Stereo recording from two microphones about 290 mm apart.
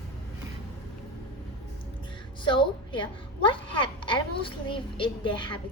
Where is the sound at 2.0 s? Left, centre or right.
Centre.